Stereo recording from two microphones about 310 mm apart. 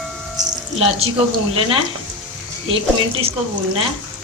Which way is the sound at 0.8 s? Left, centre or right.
Centre.